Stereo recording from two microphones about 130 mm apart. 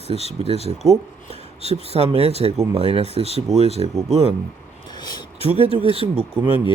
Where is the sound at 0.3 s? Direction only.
50° right (ahead or behind).